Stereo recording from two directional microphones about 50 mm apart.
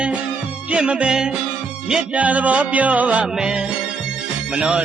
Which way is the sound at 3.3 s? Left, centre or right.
Centre.